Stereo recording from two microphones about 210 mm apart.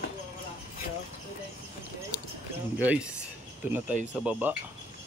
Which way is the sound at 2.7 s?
5° right (ahead or behind).